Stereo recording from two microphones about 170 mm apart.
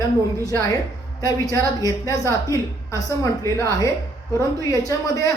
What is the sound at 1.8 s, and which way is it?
A woman's voice, 20° left (ahead or behind).